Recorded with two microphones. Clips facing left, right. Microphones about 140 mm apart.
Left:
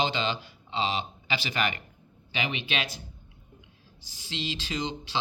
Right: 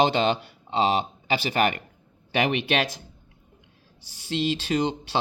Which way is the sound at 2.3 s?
70° right (ahead or behind).